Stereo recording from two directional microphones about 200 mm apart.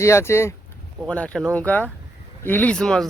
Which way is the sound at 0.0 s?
15° left (ahead or behind).